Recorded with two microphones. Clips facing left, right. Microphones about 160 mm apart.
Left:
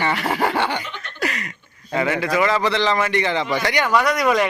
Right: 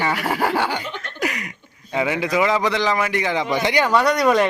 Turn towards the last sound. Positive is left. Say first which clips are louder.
# right 1 dB
turn(degrees=-30)  # may be behind; listen again after turning